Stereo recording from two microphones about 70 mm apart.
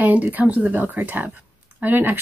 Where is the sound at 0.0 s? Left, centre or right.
Right.